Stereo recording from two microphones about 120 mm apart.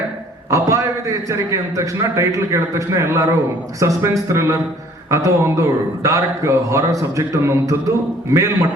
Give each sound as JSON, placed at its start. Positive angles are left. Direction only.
{"t": 0.5, "sound": "a man's voice", "side_deg": -25}